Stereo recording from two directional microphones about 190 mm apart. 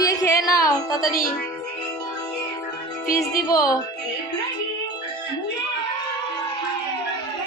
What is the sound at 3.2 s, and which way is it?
Speech, 15° left (ahead or behind).